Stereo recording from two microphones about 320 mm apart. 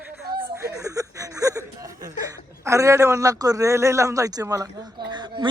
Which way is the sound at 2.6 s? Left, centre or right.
Centre.